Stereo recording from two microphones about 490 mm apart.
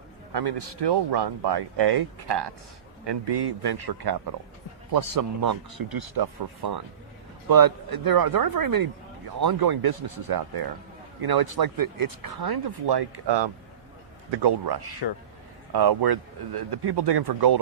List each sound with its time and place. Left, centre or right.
0.3 s speech: right